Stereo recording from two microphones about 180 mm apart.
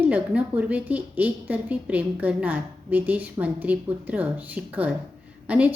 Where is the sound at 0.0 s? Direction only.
10° right (ahead or behind).